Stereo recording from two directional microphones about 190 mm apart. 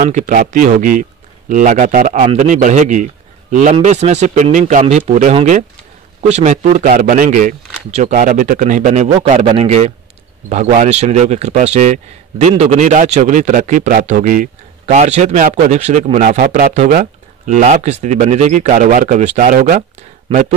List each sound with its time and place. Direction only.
0.0 s a man's voice: 40° right (ahead or behind)